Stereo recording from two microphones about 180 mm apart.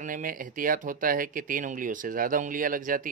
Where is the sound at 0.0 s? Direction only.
50° right (ahead or behind).